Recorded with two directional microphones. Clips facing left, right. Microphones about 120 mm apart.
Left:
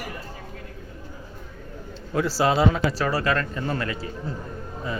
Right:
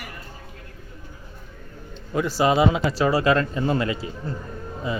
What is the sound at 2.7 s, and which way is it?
A man's voice, 20° right (ahead or behind).